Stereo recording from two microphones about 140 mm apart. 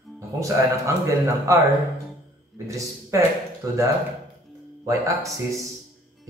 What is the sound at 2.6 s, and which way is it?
A man's voice, 20° right (ahead or behind).